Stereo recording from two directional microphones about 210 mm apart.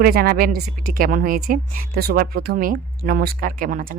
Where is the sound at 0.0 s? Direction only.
45° right (ahead or behind).